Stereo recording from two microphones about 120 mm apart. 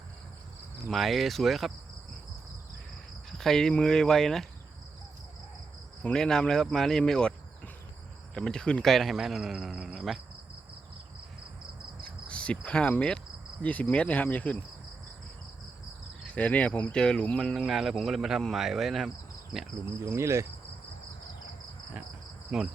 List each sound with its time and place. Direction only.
0.9 s speech: centre (ahead or behind)
3.3 s speech: 5° left (ahead or behind)
6.0 s speech: 10° left (ahead or behind)
8.4 s speech: 5° left (ahead or behind)
12.0 s cricket: 10° left (ahead or behind)
13.6 s speech: 10° left (ahead or behind)
16.2 s speech: 10° left (ahead or behind)
20.0 s insect: 20° right (ahead or behind)
22.5 s cricket: 5° right (ahead or behind)